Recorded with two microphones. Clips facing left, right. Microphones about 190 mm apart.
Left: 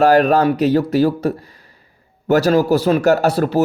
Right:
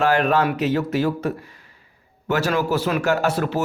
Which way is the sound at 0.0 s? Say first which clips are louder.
Left 6 dB; 40° left (ahead or behind).